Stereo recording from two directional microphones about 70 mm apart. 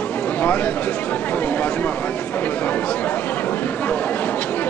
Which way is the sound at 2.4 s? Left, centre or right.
Left.